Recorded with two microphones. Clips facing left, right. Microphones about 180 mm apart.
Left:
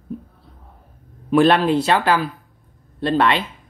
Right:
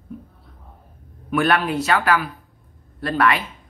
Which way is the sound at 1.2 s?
30° left (ahead or behind).